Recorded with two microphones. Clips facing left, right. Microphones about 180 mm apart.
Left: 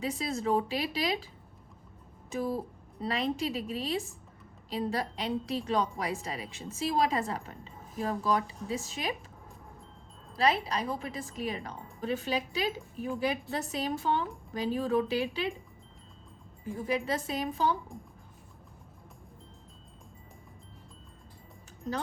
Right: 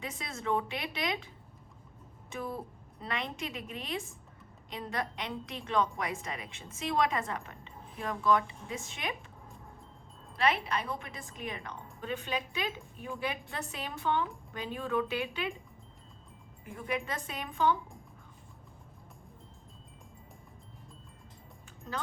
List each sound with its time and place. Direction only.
0.0 s a woman's voice: 35° left (ahead or behind)
2.3 s a woman's voice: 35° left (ahead or behind)
10.3 s a woman's voice: 35° left (ahead or behind)
16.7 s a woman's voice: 30° left (ahead or behind)